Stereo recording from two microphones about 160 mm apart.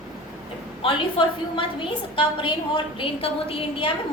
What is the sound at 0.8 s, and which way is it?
A woman's voice, 30° left (ahead or behind).